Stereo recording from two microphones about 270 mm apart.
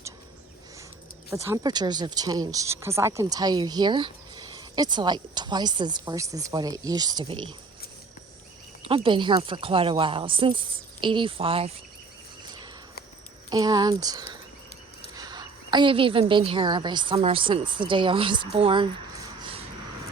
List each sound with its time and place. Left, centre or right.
1.3 s speech: centre
8.9 s speech: centre
13.5 s speech: centre
18.5 s a sound: centre